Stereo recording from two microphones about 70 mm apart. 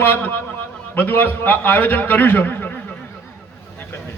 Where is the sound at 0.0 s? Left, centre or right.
Left.